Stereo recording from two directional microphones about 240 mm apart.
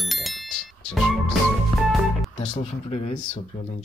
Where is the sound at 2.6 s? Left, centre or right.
Left.